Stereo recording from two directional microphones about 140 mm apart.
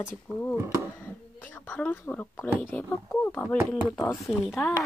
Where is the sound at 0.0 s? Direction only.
10° left (ahead or behind).